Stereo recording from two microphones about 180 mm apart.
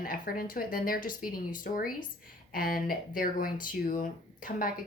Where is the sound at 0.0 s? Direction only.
50° left (ahead or behind).